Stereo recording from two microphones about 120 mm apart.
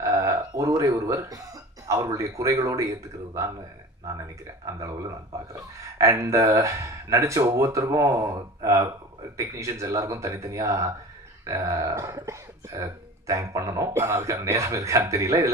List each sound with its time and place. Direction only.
0.0 s speech: 25° right (ahead or behind)
4.6 s speech: 25° right (ahead or behind)